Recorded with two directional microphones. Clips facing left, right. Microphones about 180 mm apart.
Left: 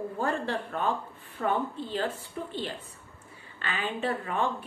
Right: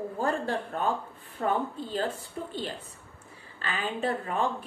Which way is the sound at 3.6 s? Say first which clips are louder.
Right 1 dB; 40° right (ahead or behind).